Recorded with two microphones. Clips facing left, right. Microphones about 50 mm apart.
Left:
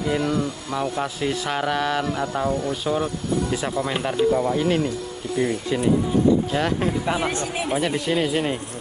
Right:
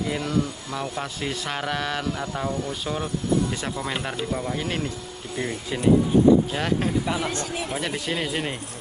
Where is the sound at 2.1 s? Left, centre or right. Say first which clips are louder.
Left 4 dB; left.